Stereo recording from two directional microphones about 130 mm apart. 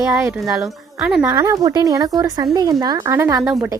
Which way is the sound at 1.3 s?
25° right (ahead or behind).